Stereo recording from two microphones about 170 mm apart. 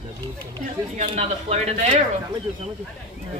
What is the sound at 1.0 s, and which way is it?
Speech, 35° right (ahead or behind).